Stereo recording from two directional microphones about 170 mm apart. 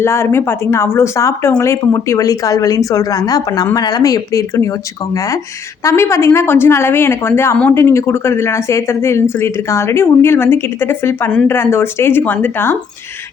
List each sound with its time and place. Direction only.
0.0 s a woman's voice: 15° left (ahead or behind)